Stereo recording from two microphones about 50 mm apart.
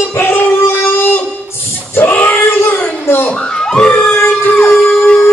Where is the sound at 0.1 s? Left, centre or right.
Left.